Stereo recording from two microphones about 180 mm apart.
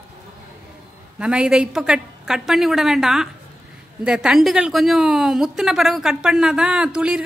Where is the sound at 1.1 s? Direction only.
5° right (ahead or behind).